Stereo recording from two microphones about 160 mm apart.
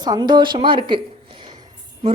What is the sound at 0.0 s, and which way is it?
A woman's voice, 25° right (ahead or behind).